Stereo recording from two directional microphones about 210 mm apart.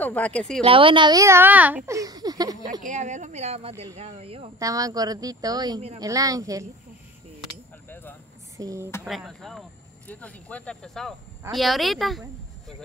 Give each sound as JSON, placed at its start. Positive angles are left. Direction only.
{"t": 0.0, "sound": "speech", "side_deg": 5}
{"t": 0.7, "sound": "a woman's voice", "side_deg": -25}
{"t": 2.8, "sound": "a woman's voice", "side_deg": -35}
{"t": 4.6, "sound": "a woman's voice", "side_deg": -15}
{"t": 7.9, "sound": "vehicle", "side_deg": 10}
{"t": 8.5, "sound": "a woman's voice", "side_deg": -15}
{"t": 9.0, "sound": "speech", "side_deg": 0}